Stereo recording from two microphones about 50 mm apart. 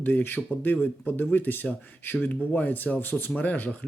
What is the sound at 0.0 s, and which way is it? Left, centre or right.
Speech, left.